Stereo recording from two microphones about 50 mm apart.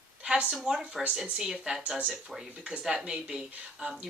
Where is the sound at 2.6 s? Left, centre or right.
Right.